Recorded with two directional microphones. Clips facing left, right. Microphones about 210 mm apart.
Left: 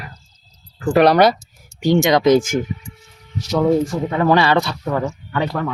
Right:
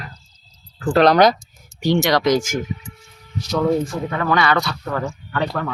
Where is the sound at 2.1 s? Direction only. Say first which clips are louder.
Left 4 dB; 25° left (ahead or behind).